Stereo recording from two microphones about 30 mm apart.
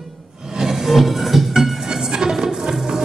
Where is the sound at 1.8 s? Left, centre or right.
Centre.